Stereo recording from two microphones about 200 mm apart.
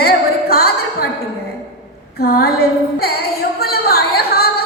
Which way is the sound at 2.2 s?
50° left (ahead or behind).